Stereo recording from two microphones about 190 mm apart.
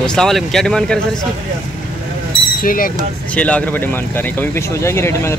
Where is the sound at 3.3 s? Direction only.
5° left (ahead or behind).